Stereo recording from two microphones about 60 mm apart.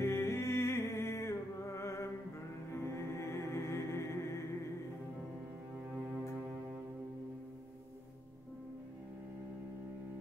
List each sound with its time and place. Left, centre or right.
0.0 s music: left